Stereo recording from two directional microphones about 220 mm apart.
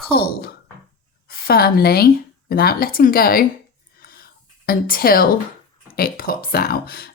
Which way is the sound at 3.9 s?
45° left (ahead or behind).